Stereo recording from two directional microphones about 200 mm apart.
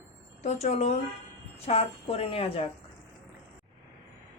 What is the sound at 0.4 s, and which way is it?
A woman's voice, 35° left (ahead or behind).